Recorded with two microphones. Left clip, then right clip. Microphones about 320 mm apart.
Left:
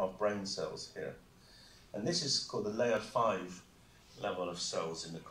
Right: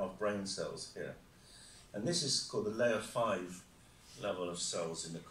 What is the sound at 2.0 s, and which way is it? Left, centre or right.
Speech, centre.